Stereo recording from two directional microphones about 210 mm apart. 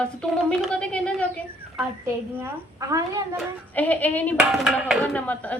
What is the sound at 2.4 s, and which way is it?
Speech, 15° right (ahead or behind).